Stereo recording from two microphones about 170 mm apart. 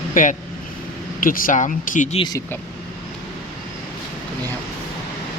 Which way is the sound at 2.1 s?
25° left (ahead or behind).